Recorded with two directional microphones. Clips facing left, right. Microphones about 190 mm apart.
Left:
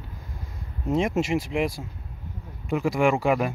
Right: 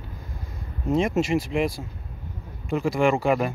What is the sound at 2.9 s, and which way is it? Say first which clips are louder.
Speech: right 1 dB; 10° left (ahead or behind).